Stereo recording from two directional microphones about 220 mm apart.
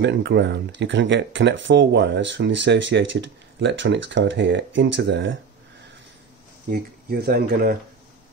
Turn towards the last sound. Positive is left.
turn(degrees=-45)  # may be behind; listen again after turning